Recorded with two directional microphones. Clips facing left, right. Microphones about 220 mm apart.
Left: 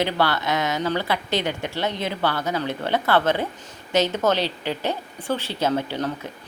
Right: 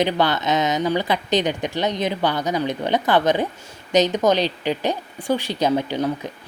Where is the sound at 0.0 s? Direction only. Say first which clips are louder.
Right 3 dB; 20° right (ahead or behind).